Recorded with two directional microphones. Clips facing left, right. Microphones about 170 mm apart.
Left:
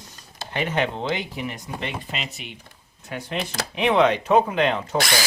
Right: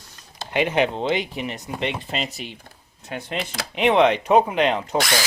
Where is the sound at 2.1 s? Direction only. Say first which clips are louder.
Right 5 dB; 35° right (ahead or behind).